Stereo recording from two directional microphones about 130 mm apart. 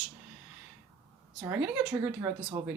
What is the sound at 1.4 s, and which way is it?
Speech, 15° right (ahead or behind).